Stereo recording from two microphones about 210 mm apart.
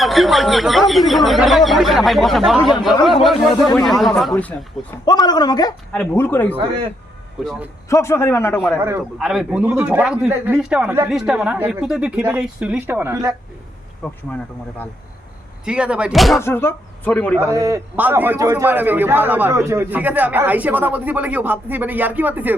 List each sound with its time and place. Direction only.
0.0 s a man's voice: centre (ahead or behind)
5.0 s a man's voice: 20° left (ahead or behind)
5.9 s a man's voice: 5° left (ahead or behind)
7.9 s a man's voice: 15° left (ahead or behind)
8.8 s a man's voice: 10° right (ahead or behind)
14.0 s a man's voice: 5° left (ahead or behind)
15.6 s a man's voice: 5° right (ahead or behind)
16.4 s a man's voice: 10° left (ahead or behind)
17.5 s a man's voice: 15° right (ahead or behind)